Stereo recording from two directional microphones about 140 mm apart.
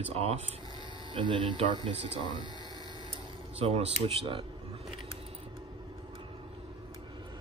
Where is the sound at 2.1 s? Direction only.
35° left (ahead or behind).